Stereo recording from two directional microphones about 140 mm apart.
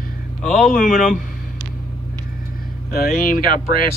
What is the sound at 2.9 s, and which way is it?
Speech, 90° left.